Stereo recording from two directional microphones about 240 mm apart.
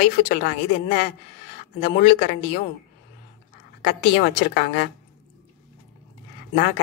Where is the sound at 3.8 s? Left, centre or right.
Left.